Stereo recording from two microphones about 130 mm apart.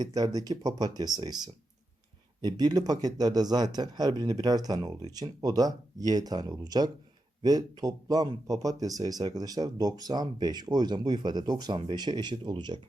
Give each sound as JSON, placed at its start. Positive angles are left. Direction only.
{"t": 0.0, "sound": "a man's voice", "side_deg": -30}